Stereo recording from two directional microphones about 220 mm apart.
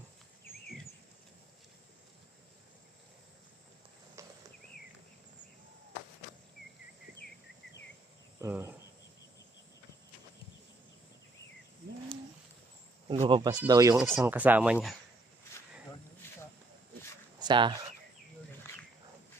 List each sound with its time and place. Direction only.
4.2 s a sound: 15° right (ahead or behind)
8.4 s cricket: 15° right (ahead or behind)
13.1 s speech: 25° right (ahead or behind)
13.9 s speech: 5° right (ahead or behind)
17.4 s speech: 20° right (ahead or behind)